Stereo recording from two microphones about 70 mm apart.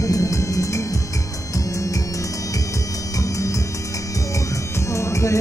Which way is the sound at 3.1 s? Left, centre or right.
Left.